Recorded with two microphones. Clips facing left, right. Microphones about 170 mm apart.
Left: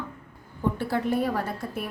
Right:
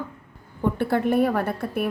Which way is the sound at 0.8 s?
60° right (ahead or behind).